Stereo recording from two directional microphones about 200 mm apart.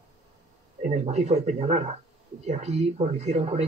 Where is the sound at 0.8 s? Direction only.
35° right (ahead or behind).